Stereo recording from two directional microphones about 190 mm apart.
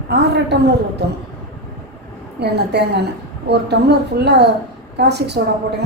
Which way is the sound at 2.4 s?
60° right (ahead or behind).